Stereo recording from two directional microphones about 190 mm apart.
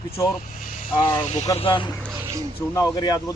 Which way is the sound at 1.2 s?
35° left (ahead or behind).